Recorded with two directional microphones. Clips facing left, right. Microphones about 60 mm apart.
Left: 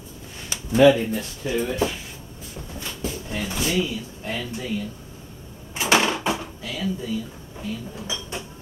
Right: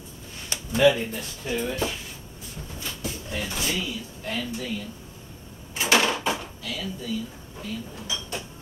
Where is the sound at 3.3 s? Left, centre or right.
Centre.